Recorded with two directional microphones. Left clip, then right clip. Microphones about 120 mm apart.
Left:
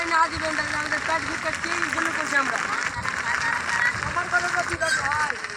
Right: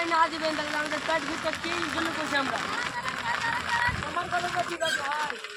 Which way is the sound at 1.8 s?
50° left (ahead or behind).